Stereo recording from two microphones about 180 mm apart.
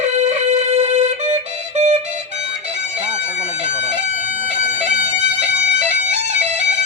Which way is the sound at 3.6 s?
40° right (ahead or behind).